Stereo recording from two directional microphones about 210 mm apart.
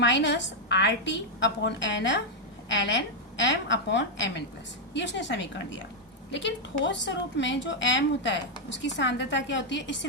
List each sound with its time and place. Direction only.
0.0 s a woman's voice: 60° left (ahead or behind)